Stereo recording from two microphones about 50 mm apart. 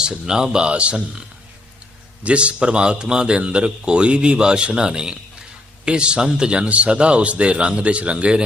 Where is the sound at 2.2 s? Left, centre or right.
Right.